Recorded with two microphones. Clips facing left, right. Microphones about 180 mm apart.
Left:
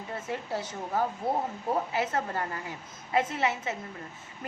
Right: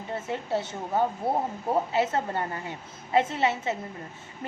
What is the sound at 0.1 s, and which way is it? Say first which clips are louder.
Speech: right 5 dB; 25° right (ahead or behind).